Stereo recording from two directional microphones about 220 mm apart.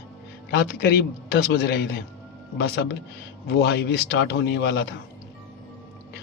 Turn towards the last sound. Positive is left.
turn(degrees=45)  # may be behind; listen again after turning